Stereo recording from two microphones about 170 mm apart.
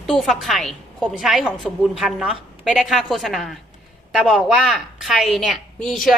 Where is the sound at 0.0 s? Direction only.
Centre (ahead or behind).